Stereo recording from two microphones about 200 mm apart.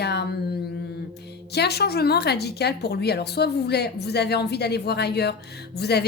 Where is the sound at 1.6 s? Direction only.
55° left (ahead or behind).